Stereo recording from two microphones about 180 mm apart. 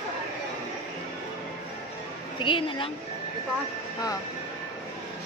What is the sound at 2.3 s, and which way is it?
Speech, 30° left (ahead or behind).